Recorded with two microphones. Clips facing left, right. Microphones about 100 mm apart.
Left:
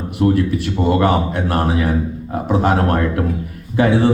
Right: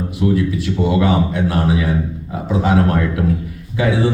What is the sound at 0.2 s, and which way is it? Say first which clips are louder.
A man's voice: left 2 dB; 55° left (ahead or behind).